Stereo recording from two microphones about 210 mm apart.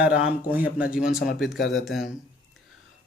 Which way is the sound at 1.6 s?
60° left (ahead or behind).